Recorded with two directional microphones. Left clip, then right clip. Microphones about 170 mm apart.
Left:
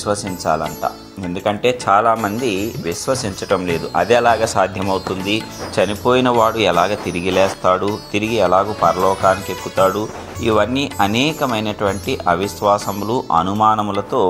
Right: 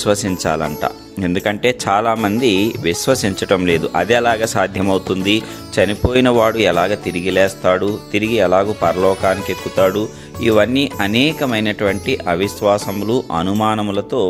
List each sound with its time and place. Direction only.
0.0 s speech: 45° right (ahead or behind)
9.3 s speech: centre (ahead or behind)
9.8 s speech: 40° right (ahead or behind)